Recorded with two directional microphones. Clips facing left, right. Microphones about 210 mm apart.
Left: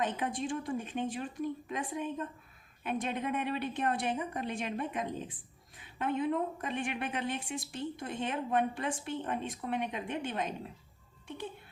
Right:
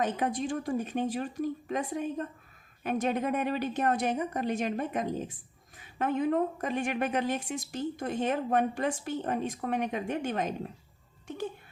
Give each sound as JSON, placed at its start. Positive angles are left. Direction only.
{"t": 0.0, "sound": "a woman's voice", "side_deg": -40}